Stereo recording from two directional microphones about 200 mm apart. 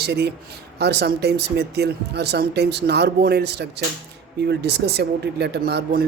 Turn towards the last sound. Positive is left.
turn(degrees=-50)  # may be behind; listen again after turning